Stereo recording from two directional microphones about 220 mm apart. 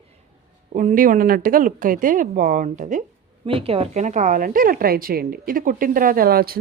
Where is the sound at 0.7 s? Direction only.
35° right (ahead or behind).